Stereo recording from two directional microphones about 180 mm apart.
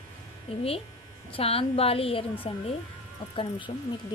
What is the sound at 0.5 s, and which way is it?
A woman's voice, 35° left (ahead or behind).